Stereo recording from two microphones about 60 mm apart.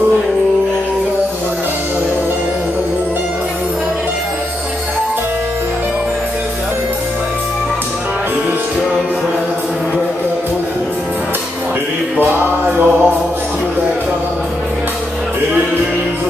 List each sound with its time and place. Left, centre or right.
12.2 s music: right